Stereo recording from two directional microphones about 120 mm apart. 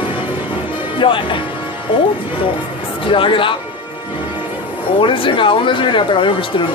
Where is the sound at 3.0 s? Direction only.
45° left (ahead or behind).